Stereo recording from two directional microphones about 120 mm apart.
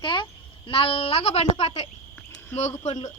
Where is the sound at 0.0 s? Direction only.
40° left (ahead or behind).